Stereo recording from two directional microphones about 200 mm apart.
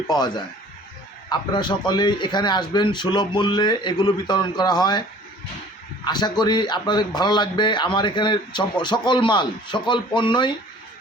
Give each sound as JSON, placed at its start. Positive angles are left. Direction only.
{"t": 0.1, "sound": "speech", "side_deg": 20}
{"t": 6.1, "sound": "speech", "side_deg": 20}